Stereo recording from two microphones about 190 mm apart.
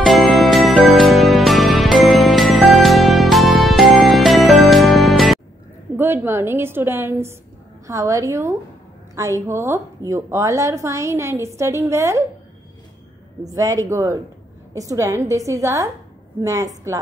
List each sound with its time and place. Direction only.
0.0 s music: centre (ahead or behind)
5.9 s a woman's voice: 10° right (ahead or behind)
13.5 s a woman's voice: 20° right (ahead or behind)